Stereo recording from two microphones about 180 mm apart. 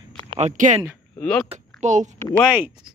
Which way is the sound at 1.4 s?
40° right (ahead or behind).